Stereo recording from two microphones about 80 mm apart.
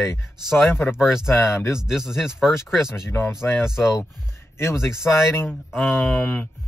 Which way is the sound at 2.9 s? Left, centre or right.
Left.